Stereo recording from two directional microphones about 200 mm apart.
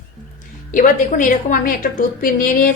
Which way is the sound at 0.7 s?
40° left (ahead or behind).